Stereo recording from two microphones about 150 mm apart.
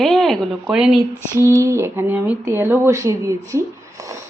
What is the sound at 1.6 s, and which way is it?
Speech, 20° right (ahead or behind).